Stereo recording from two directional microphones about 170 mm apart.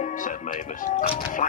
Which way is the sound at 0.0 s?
50° left (ahead or behind).